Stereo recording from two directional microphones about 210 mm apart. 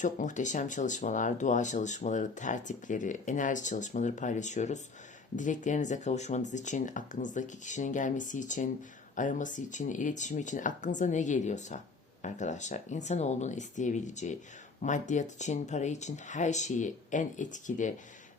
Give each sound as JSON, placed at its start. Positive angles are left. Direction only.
{"t": 0.0, "sound": "speech", "side_deg": 35}